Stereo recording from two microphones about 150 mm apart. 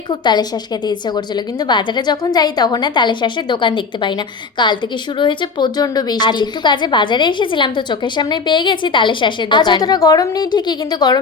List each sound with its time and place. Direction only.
0.1 s a woman's voice: 30° left (ahead or behind)